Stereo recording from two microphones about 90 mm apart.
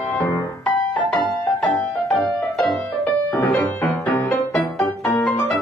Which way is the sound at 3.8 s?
15° left (ahead or behind).